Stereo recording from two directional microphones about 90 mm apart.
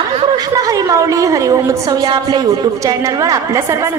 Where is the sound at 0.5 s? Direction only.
40° right (ahead or behind).